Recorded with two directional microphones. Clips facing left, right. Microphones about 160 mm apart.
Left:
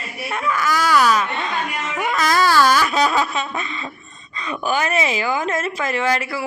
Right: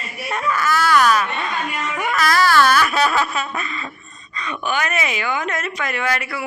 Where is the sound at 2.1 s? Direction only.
20° left (ahead or behind).